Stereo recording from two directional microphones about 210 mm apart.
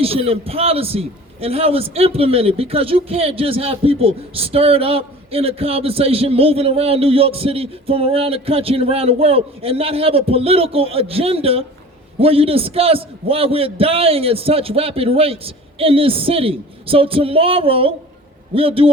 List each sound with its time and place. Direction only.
0.0 s a man's voice: 25° right (ahead or behind)